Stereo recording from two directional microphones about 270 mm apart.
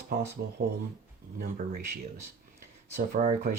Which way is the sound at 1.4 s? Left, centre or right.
Right.